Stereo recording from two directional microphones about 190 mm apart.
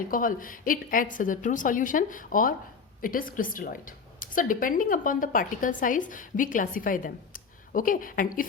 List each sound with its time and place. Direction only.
0.1 s a woman's voice: 45° left (ahead or behind)